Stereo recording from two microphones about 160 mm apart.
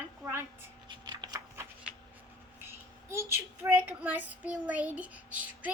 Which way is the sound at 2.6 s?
15° right (ahead or behind).